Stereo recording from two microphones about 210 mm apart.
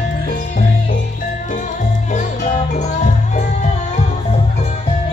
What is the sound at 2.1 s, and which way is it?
Music, 35° left (ahead or behind).